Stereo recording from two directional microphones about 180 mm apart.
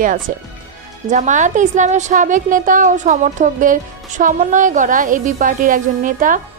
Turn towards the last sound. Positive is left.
turn(degrees=-45)  # may be behind; listen again after turning